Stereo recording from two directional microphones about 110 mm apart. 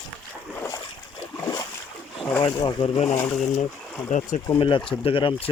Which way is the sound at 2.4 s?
50° left (ahead or behind).